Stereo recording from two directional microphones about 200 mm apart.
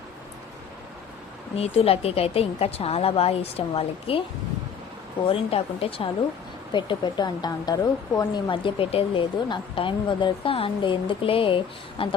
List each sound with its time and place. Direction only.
1.5 s a woman's voice: 30° left (ahead or behind)
5.3 s a woman's voice: 30° left (ahead or behind)